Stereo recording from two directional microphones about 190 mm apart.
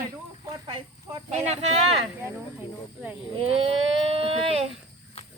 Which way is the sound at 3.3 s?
30° right (ahead or behind).